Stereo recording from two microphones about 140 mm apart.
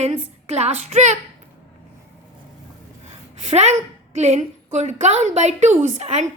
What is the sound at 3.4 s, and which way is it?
A woman's voice, 50° right (ahead or behind).